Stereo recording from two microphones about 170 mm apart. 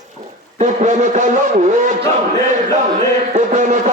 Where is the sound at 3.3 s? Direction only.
45° right (ahead or behind).